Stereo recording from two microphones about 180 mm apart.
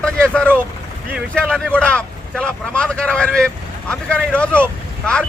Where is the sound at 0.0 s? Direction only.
5° left (ahead or behind).